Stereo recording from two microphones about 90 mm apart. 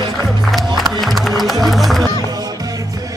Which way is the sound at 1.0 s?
Centre (ahead or behind).